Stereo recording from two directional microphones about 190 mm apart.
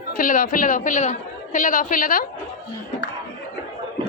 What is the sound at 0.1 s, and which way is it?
Speech, 45° left (ahead or behind).